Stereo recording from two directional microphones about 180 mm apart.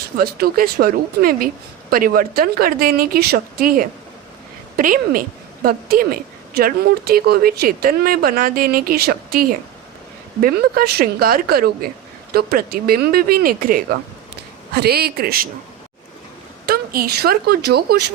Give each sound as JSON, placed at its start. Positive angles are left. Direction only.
{"t": 0.2, "sound": "a woman's voice", "side_deg": -55}
{"t": 16.6, "sound": "speech", "side_deg": -55}